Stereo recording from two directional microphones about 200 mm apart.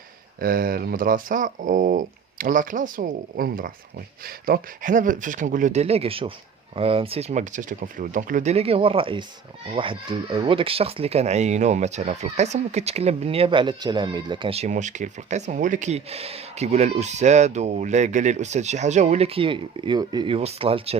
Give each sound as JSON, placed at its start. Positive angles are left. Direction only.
{"t": 0.3, "sound": "speech", "side_deg": -45}